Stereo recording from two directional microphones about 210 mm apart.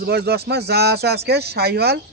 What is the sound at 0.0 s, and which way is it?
Speech, 50° right (ahead or behind).